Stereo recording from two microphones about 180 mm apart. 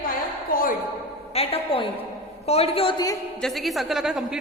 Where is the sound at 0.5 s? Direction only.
50° left (ahead or behind).